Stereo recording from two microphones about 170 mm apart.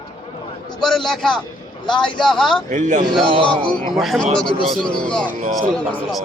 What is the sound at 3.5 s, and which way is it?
Speech, 5° left (ahead or behind).